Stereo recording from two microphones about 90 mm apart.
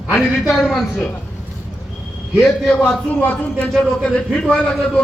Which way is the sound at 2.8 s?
15° left (ahead or behind).